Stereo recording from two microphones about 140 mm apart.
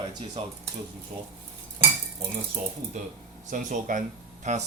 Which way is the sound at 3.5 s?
70° right (ahead or behind).